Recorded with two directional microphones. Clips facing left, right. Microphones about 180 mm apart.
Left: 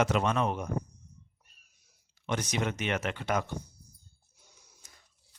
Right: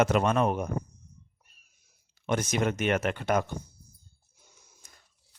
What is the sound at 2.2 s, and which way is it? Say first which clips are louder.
Speech: right 4 dB; 50° right (ahead or behind).